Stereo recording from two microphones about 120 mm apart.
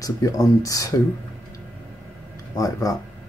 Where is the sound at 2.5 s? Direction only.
30° left (ahead or behind).